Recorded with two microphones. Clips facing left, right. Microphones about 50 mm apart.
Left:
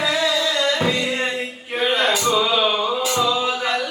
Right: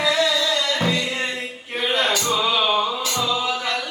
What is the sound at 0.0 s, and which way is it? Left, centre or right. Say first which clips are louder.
Music: even; left.